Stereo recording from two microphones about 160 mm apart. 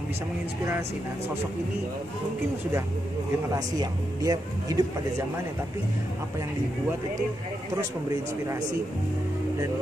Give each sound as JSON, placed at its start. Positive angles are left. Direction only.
{"t": 3.5, "sound": "speech", "side_deg": -25}